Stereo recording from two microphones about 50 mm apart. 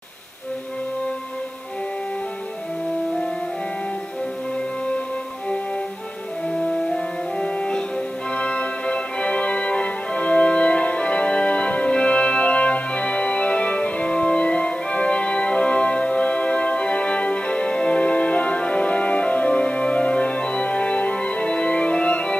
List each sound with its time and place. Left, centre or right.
6.5 s music: centre